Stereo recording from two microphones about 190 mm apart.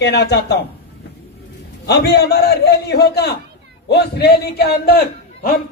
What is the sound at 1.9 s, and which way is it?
A man's voice, 60° left (ahead or behind).